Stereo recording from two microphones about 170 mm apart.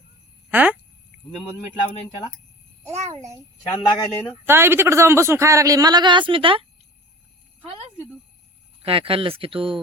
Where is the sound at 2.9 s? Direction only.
40° right (ahead or behind).